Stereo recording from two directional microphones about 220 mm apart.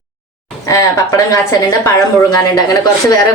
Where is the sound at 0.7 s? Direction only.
15° left (ahead or behind).